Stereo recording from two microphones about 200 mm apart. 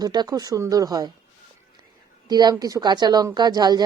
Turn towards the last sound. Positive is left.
turn(degrees=-20)  # may be behind; listen again after turning